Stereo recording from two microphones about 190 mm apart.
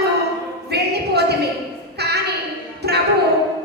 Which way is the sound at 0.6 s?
60° right (ahead or behind).